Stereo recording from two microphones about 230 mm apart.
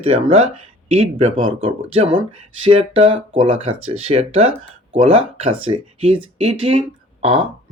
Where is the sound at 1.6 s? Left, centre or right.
Right.